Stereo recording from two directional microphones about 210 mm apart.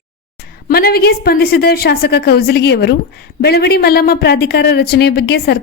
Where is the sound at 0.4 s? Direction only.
50° left (ahead or behind).